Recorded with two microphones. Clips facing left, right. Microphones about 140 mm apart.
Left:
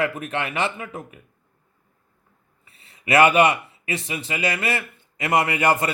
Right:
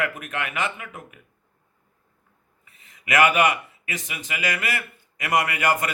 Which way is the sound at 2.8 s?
30° left (ahead or behind).